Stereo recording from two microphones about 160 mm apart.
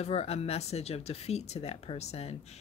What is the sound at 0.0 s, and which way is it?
Speech, 40° left (ahead or behind).